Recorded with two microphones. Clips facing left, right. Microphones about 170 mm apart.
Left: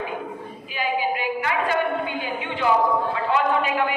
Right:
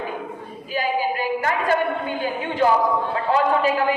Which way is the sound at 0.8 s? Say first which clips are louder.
Right 1 dB; 40° right (ahead or behind).